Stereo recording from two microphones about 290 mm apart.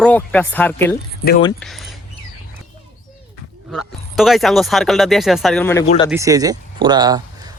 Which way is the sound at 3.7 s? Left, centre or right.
Centre.